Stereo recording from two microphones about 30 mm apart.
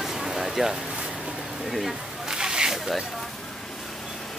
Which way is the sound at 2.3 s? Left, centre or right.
Right.